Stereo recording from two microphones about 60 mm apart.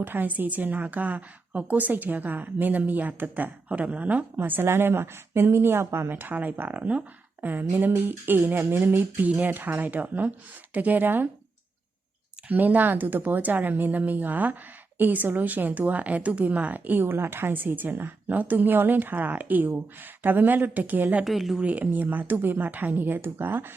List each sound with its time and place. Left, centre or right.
0.0 s a woman's voice: right
4.4 s speech: right
6.1 s speech: right
12.5 s speech: right
21.2 s speech: centre
21.6 s speech: right